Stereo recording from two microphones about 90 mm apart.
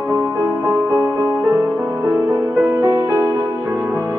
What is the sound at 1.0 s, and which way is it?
Music, 25° right (ahead or behind).